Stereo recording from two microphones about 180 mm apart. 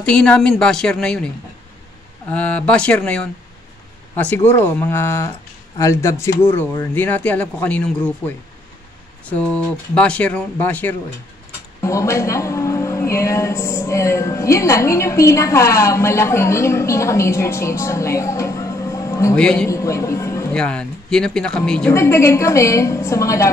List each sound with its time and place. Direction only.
0.0 s speech: 5° left (ahead or behind)
2.3 s a woman's voice: 5° left (ahead or behind)
9.2 s a woman's voice: 5° left (ahead or behind)
19.3 s speech: 5° left (ahead or behind)
19.7 s speech: 15° left (ahead or behind)
20.5 s speech: 5° left (ahead or behind)
21.9 s a woman's voice: 15° left (ahead or behind)